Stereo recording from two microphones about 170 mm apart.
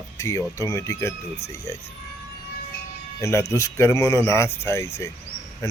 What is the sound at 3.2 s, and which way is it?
Speech, 15° left (ahead or behind).